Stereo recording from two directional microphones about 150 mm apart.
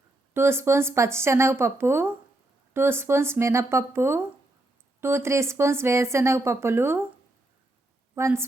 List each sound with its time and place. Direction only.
0.3 s speech: 15° right (ahead or behind)
8.1 s speech: 15° right (ahead or behind)